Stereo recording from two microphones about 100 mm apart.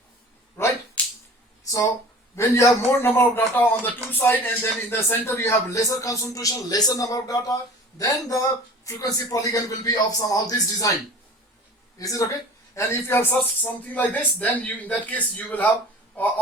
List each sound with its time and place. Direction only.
1.6 s a sound: 30° left (ahead or behind)
2.3 s a man's voice: 30° left (ahead or behind)
11.9 s speech: 35° left (ahead or behind); by 15.7 s 15° left (ahead or behind)